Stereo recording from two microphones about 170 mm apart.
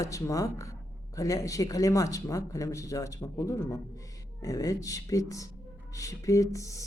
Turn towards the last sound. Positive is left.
turn(degrees=20)  # may be behind; listen again after turning